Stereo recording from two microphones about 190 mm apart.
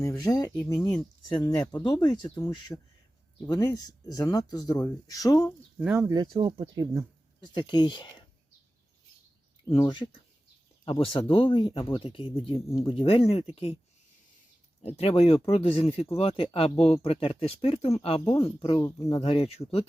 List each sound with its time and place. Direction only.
0.0 s speech: 15° left (ahead or behind)
2.3 s speech: 10° left (ahead or behind)
5.8 s speech: 5° right (ahead or behind)
6.3 s speech: 20° right (ahead or behind)
7.4 s speech: 25° left (ahead or behind)
9.6 s speech: 20° left (ahead or behind)
14.8 s speech: 35° left (ahead or behind); by 19.2 s 15° left (ahead or behind)
19.2 s speech: 30° left (ahead or behind)